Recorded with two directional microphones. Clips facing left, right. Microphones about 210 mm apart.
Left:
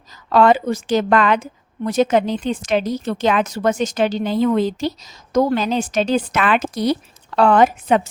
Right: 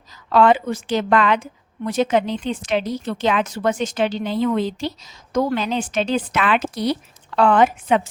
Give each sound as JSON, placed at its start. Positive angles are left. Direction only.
{"t": 0.3, "sound": "a woman's voice", "side_deg": 40}